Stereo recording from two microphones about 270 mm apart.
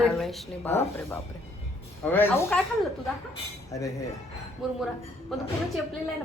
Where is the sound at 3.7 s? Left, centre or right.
Centre.